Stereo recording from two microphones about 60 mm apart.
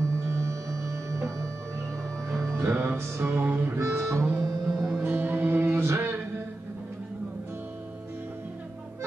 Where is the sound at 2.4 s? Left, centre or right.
Right.